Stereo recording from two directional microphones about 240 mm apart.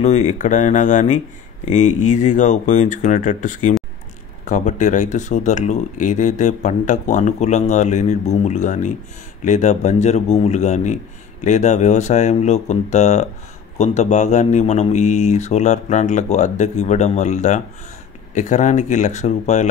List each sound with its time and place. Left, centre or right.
0.0 s speech: left